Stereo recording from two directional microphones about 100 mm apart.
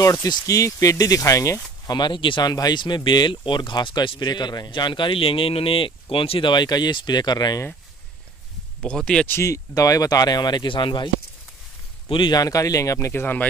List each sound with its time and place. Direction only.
0.0 s speech: 30° left (ahead or behind)
1.9 s speech: 50° left (ahead or behind)
2.5 s speech: 45° left (ahead or behind); by 6.5 s 65° left (ahead or behind)
6.5 s speech: 45° left (ahead or behind)
8.8 s speech: 10° left (ahead or behind)
9.3 s speech: 30° left (ahead or behind); by 11.1 s 55° left (ahead or behind)
12.1 s speech: 55° left (ahead or behind)
12.4 s speech: 35° left (ahead or behind)
13.1 s speech: 20° left (ahead or behind)